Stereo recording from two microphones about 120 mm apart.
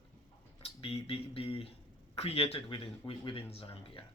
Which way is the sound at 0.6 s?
50° left (ahead or behind).